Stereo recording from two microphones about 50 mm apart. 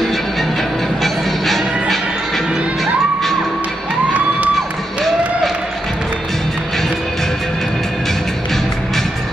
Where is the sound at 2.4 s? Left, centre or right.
Centre.